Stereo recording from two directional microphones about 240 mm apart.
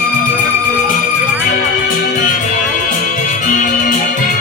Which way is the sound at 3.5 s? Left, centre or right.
Left.